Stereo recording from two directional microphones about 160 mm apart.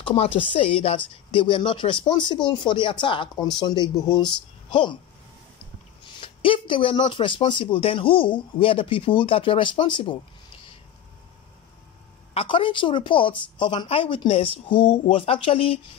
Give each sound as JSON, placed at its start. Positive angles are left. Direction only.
{"t": 0.0, "sound": "speech", "side_deg": 35}
{"t": 6.1, "sound": "speech", "side_deg": 35}
{"t": 12.4, "sound": "speech", "side_deg": 30}